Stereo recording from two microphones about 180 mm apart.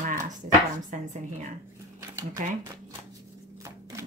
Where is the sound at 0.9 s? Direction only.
45° right (ahead or behind).